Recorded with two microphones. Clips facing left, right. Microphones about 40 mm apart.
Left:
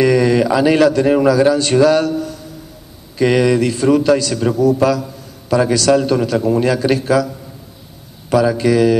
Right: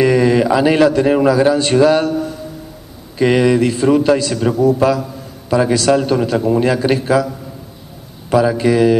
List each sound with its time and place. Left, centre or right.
0.0 s a man's voice: centre
8.3 s a man's voice: right